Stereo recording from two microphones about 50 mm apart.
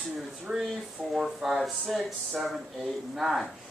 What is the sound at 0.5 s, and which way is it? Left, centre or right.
A man's voice, centre.